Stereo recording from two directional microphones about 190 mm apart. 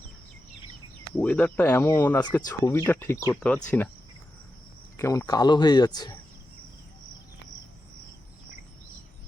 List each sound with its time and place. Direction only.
1.1 s speech: 5° left (ahead or behind)
4.9 s speech: 15° left (ahead or behind)